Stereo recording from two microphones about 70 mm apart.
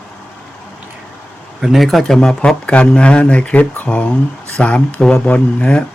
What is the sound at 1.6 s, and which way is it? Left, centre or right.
Speech, centre.